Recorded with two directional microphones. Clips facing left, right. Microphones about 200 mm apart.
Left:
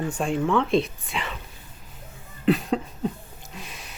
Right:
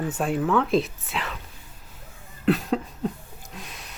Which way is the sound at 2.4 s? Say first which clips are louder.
Left 1 dB; centre (ahead or behind).